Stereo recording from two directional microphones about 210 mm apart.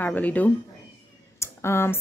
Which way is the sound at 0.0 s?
10° left (ahead or behind).